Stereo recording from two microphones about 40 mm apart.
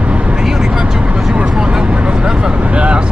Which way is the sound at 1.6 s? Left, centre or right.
Right.